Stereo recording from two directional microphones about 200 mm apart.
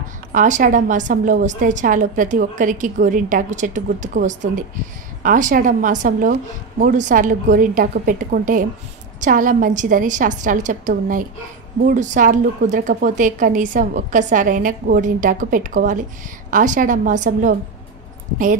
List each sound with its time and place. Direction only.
0.3 s a woman's voice: 40° right (ahead or behind)